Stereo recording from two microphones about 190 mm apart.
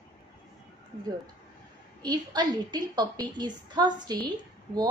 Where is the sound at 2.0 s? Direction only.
20° right (ahead or behind).